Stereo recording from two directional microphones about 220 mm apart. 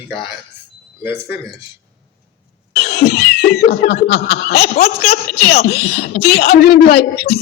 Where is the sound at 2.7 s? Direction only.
45° left (ahead or behind).